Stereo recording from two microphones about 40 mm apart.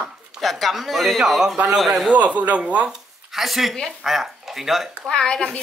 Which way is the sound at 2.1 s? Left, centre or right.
Right.